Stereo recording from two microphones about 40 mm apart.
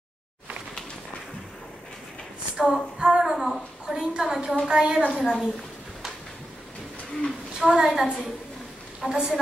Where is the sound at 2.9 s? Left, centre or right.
Centre.